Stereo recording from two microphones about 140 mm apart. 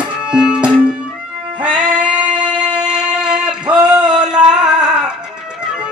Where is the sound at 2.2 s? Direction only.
35° right (ahead or behind).